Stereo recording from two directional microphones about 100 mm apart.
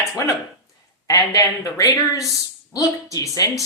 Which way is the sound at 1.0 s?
35° left (ahead or behind).